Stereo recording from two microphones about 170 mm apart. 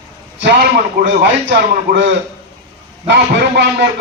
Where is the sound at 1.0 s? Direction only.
90° right.